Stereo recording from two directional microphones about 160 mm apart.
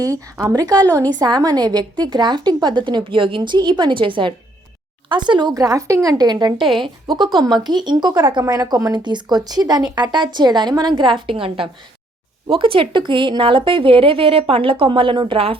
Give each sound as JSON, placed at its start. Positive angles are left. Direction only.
{"t": 0.0, "sound": "a woman's voice", "side_deg": -20}